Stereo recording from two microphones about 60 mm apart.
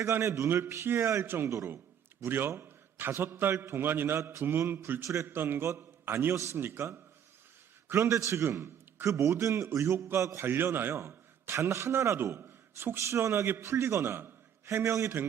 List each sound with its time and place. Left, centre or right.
0.1 s a man's voice: right
1.2 s a man's voice: right
1.5 s a man's voice: right
2.2 s a man's voice: right
4.2 s a man's voice: right
4.7 s a man's voice: right
5.0 s a man's voice: right
5.3 s a man's voice: right
10.4 s a man's voice: right